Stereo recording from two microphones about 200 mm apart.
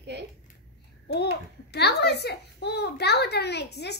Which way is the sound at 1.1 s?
55° left (ahead or behind).